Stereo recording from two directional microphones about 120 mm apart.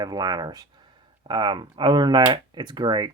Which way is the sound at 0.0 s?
35° right (ahead or behind).